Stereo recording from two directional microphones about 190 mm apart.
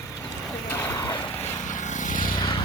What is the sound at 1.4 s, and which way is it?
Vehicle, 40° left (ahead or behind).